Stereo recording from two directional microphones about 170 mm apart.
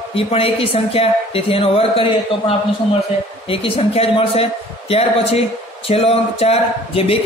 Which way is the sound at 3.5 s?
35° left (ahead or behind).